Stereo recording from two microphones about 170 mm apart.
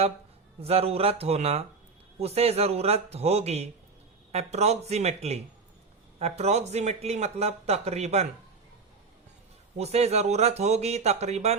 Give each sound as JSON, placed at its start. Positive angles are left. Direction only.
{"t": 0.6, "sound": "speech", "side_deg": -35}
{"t": 9.7, "sound": "speech", "side_deg": -40}